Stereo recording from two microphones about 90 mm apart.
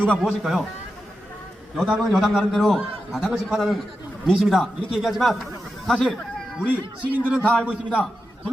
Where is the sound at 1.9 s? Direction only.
5° right (ahead or behind).